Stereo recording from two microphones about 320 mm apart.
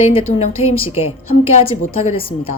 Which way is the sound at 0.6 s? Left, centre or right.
Left.